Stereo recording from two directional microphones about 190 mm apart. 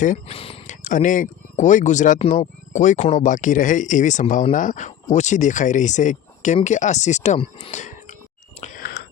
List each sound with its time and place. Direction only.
0.0 s speech: 40° left (ahead or behind)
0.3 s speech: 30° left (ahead or behind)
8.6 s a sound: 45° left (ahead or behind)